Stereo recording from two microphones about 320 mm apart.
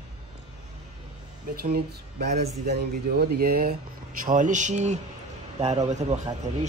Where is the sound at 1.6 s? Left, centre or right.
Right.